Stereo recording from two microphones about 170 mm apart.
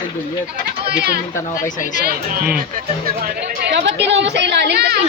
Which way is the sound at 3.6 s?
90° right.